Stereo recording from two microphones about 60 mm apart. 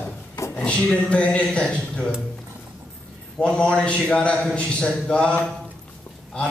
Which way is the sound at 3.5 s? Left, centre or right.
Centre.